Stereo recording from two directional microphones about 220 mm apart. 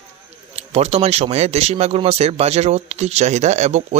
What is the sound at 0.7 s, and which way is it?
Speech, 30° right (ahead or behind).